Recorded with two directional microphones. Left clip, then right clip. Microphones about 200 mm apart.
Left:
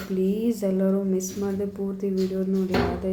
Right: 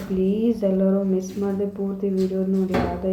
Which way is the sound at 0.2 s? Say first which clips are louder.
Right 4 dB; 20° left (ahead or behind).